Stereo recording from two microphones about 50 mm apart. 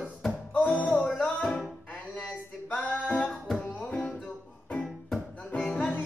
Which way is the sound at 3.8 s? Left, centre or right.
Centre.